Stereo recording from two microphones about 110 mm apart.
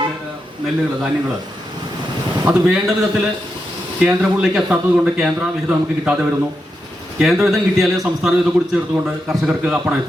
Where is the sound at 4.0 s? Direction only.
5° right (ahead or behind).